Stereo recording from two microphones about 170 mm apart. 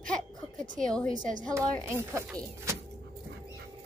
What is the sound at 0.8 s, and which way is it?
Speech, 5° left (ahead or behind).